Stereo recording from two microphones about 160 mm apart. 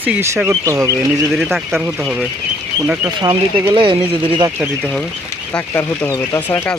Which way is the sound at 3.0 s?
25° right (ahead or behind).